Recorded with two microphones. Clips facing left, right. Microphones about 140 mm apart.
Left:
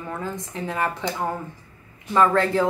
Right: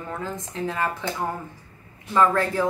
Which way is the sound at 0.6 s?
15° left (ahead or behind).